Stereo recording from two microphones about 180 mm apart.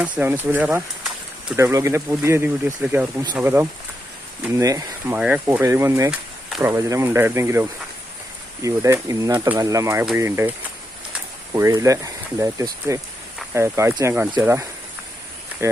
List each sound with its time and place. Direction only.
0.0 s speech: 10° right (ahead or behind)
11.5 s speech: 20° right (ahead or behind)